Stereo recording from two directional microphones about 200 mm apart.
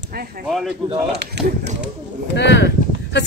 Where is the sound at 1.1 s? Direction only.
55° right (ahead or behind).